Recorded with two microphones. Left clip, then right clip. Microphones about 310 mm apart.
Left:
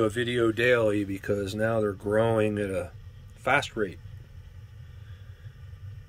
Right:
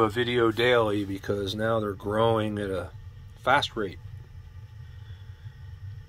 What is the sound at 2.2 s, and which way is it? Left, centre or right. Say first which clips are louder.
Speech: even; centre.